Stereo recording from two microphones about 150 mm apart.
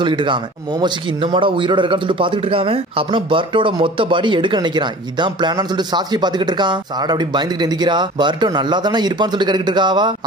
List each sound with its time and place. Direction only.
0.0 s speech: 30° right (ahead or behind)